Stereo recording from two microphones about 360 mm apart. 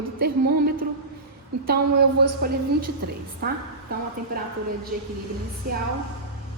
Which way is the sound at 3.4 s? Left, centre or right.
Right.